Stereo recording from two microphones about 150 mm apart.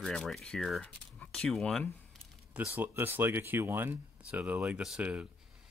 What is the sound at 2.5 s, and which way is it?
Speech, 10° right (ahead or behind).